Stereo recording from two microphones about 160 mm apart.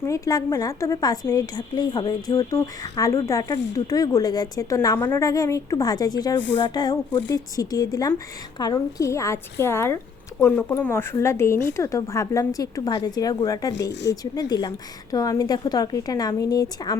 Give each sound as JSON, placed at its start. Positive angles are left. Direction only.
{"t": 0.0, "sound": "a woman's voice", "side_deg": 20}